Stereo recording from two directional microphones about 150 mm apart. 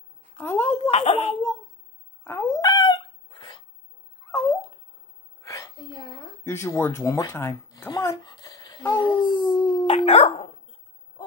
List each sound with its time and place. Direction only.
0.4 s a woman's voice: 10° left (ahead or behind)
0.8 s speech: 45° left (ahead or behind)
2.2 s speech: 15° left (ahead or behind)
2.6 s dog: 30° left (ahead or behind)
4.3 s dog: 15° left (ahead or behind)
5.4 s a sound: 20° left (ahead or behind)
6.4 s speech: 15° left (ahead or behind)
7.9 s a sound: 25° left (ahead or behind)
9.8 s dog: 45° left (ahead or behind)